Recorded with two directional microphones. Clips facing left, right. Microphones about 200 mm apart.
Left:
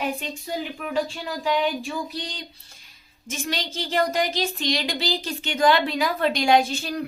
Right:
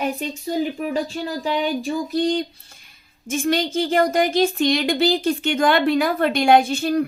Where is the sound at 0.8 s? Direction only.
40° right (ahead or behind).